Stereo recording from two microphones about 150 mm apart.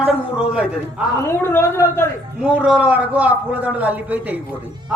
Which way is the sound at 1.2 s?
15° left (ahead or behind).